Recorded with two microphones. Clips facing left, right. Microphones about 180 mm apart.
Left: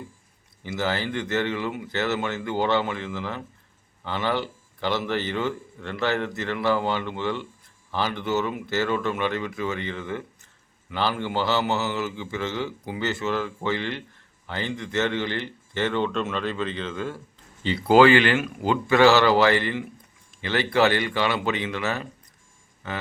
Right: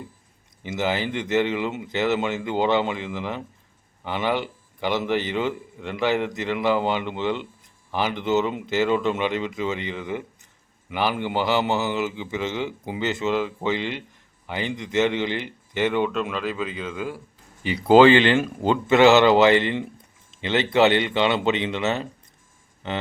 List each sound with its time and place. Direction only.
0.6 s a man's voice: 20° right (ahead or behind)